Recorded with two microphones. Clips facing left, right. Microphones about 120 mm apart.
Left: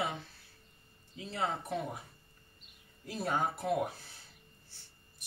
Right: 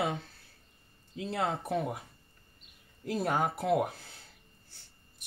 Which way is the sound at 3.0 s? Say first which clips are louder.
Right 4 dB; 55° right (ahead or behind).